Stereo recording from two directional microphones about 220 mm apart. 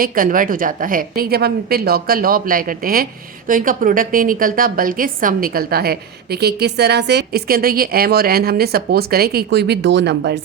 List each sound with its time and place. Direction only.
0.0 s a woman's voice: 40° right (ahead or behind)